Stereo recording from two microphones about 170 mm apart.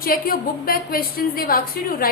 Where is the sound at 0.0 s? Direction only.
60° left (ahead or behind).